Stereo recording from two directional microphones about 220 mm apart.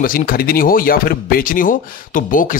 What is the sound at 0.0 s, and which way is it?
Speech, 40° left (ahead or behind).